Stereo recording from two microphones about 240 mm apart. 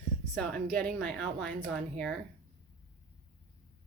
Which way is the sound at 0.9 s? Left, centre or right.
Centre.